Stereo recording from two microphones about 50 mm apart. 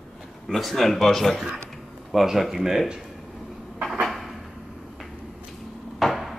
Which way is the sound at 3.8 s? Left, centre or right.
Centre.